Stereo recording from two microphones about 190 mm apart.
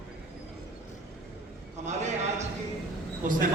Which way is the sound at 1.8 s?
40° right (ahead or behind).